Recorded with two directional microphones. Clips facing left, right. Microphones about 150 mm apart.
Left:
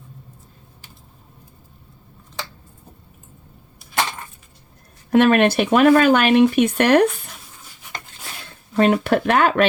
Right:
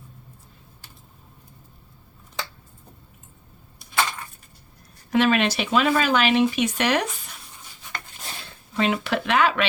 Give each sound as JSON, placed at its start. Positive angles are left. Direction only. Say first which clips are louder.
{"t": 5.1, "sound": "speech", "louder": "left 6 dB", "side_deg": 55}
{"t": 8.7, "sound": "speech", "louder": "left 7 dB", "side_deg": 50}